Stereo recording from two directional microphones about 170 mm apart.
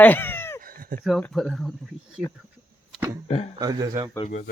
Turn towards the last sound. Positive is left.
turn(degrees=-20)  # may be behind; listen again after turning